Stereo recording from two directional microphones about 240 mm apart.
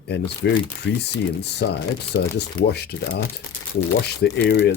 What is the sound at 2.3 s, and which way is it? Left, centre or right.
Speech, left.